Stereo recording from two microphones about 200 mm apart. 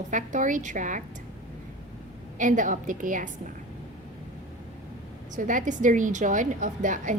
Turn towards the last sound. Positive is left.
turn(degrees=-40)  # may be behind; listen again after turning